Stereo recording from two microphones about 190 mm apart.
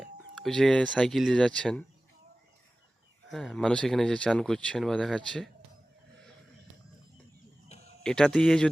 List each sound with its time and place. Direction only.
0.0 s speech: centre (ahead or behind)
3.2 s speech: centre (ahead or behind)
7.7 s a sound: 35° left (ahead or behind)
8.0 s speech: 5° left (ahead or behind)